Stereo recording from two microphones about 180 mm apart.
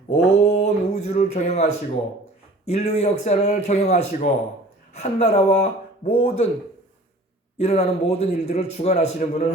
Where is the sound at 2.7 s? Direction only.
35° left (ahead or behind).